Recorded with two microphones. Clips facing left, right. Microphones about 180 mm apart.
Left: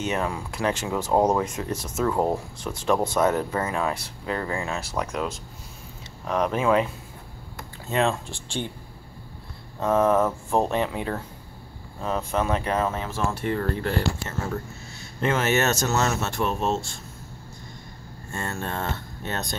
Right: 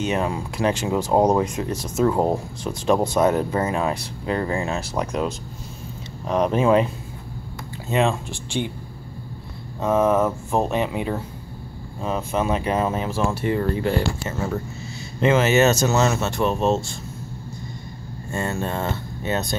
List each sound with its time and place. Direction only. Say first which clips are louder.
0.0 s speech: right 4 dB; 20° right (ahead or behind)
7.9 s speech: right 3 dB; 15° right (ahead or behind)
9.8 s speech: right 2 dB; 5° right (ahead or behind)
15.2 s speech: right 6 dB; centre (ahead or behind)
18.3 s speech: right 5 dB; 5° right (ahead or behind)